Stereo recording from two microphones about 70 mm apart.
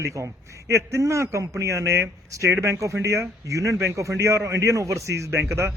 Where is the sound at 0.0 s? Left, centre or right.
Right.